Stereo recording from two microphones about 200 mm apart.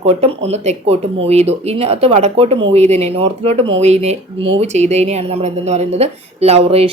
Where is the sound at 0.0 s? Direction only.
30° right (ahead or behind).